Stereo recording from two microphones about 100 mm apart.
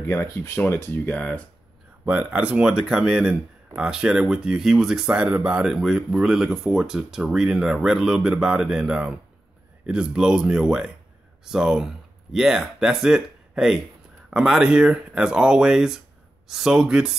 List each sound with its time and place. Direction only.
0.0 s speech: 25° left (ahead or behind)
2.0 s speech: 15° right (ahead or behind)